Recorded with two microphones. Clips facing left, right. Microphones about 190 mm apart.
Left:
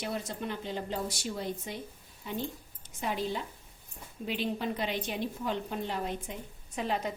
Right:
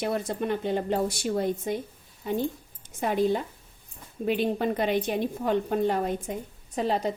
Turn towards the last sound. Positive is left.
turn(degrees=-35)  # may be behind; listen again after turning